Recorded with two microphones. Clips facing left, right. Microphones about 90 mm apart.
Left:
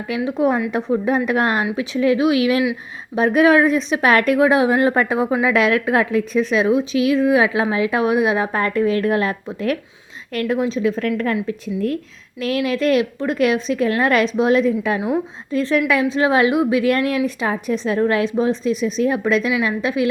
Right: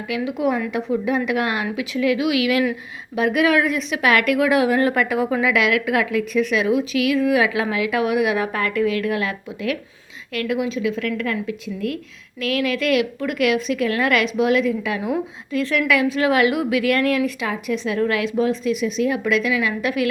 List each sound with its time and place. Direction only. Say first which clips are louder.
0.3 s a woman's voice: left 4 dB; 35° left (ahead or behind)